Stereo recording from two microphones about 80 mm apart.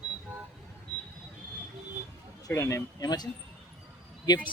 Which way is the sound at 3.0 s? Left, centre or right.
Left.